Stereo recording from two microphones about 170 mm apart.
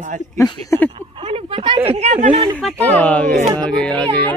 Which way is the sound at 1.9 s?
40° right (ahead or behind).